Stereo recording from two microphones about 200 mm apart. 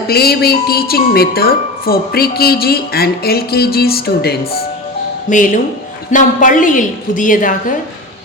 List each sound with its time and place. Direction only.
0.1 s speech: 50° left (ahead or behind)
5.3 s a woman's voice: 40° left (ahead or behind)